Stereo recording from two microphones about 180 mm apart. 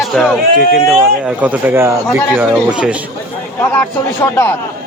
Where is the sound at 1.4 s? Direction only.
10° right (ahead or behind).